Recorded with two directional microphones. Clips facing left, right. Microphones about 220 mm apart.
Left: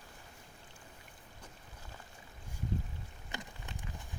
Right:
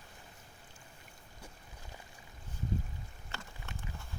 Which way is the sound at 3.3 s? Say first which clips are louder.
Left 2 dB; 15° left (ahead or behind).